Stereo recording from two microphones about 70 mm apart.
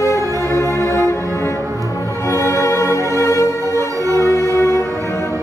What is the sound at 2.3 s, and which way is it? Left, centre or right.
Music, left.